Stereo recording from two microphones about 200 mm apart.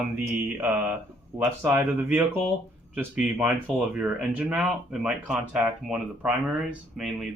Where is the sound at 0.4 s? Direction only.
10° right (ahead or behind).